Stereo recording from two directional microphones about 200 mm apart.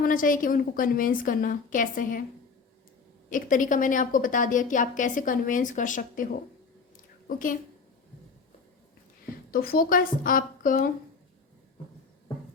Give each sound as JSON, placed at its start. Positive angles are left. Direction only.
{"t": 0.0, "sound": "a woman's voice", "side_deg": 45}
{"t": 3.2, "sound": "a woman's voice", "side_deg": 40}
{"t": 7.3, "sound": "a woman's voice", "side_deg": 45}
{"t": 9.5, "sound": "a woman's voice", "side_deg": 45}